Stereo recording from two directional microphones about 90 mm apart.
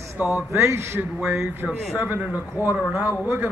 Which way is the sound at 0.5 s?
30° right (ahead or behind).